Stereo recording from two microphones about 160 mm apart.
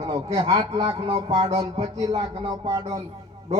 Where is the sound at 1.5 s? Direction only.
25° right (ahead or behind).